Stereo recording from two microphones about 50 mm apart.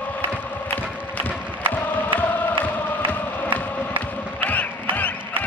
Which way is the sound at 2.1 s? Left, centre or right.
Left.